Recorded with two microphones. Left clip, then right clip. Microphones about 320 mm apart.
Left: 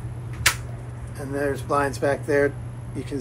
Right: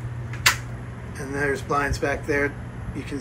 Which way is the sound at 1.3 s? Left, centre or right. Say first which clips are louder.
Even; centre.